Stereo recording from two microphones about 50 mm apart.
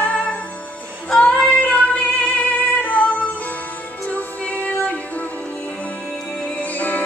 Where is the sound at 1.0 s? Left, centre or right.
Centre.